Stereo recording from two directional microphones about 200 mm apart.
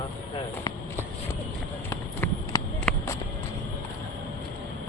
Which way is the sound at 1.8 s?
10° left (ahead or behind).